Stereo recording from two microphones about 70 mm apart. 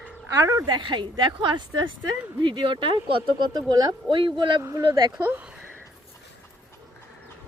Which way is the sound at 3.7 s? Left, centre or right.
Right.